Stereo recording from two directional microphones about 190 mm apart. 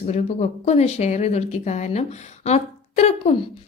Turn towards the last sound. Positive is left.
turn(degrees=35)  # may be behind; listen again after turning